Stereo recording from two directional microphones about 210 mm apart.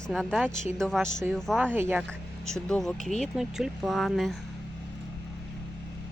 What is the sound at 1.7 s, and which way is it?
Speech, 10° right (ahead or behind).